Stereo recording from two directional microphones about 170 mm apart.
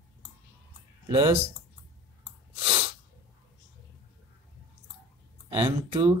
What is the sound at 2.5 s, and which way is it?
Sneeze, 35° right (ahead or behind).